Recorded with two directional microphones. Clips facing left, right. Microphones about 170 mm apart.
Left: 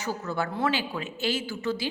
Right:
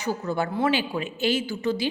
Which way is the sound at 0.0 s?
15° right (ahead or behind).